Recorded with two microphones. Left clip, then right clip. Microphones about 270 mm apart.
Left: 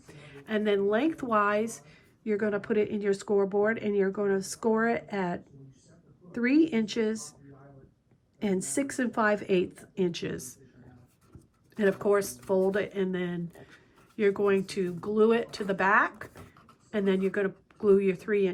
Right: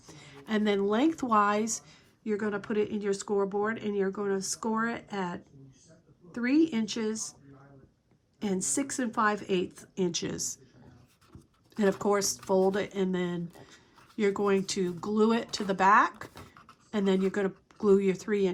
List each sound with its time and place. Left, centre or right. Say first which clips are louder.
0.1 s speech: left 1 dB; centre
8.4 s speech: left 2 dB; centre
11.7 s speech: left 2 dB; centre